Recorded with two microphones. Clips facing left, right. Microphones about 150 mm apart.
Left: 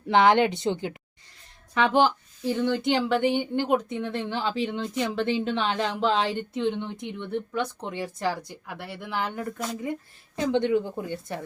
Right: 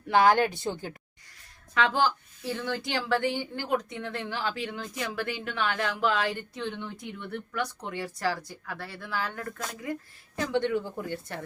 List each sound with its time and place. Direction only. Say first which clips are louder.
0.1 s a woman's voice: left 2 dB; 20° left (ahead or behind)